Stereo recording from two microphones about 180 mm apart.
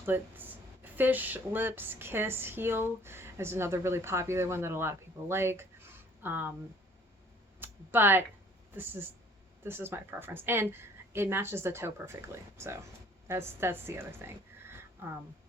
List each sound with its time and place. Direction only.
0.0 s speech: 10° right (ahead or behind)
7.6 s a sound: 10° right (ahead or behind)
8.7 s speech: 10° right (ahead or behind)